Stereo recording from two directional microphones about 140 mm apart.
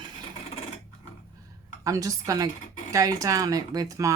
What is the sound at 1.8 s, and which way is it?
A woman's voice, 25° right (ahead or behind).